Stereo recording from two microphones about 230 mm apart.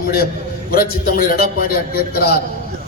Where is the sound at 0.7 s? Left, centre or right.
Left.